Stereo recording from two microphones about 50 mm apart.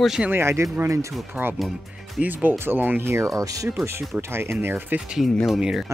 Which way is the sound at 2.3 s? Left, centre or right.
Right.